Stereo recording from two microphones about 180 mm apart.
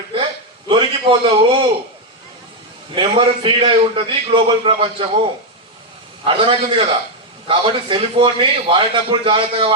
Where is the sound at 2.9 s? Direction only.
30° right (ahead or behind).